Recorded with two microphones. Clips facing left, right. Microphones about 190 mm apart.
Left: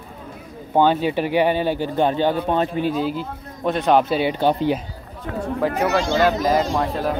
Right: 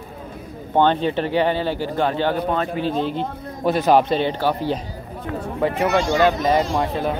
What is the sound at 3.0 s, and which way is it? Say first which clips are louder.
Speech: right 1 dB; 5° left (ahead or behind).